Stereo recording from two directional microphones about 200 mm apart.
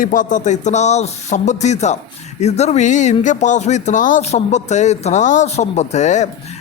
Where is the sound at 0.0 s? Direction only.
40° left (ahead or behind).